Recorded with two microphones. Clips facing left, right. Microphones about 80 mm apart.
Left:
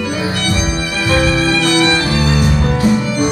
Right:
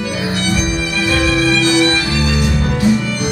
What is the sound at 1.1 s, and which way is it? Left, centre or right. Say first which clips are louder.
Violin: left 1 dB; left.